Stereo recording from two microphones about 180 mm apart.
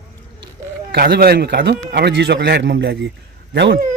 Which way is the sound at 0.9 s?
60° right (ahead or behind).